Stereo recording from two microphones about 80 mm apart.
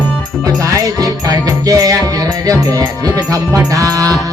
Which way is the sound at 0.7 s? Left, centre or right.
Right.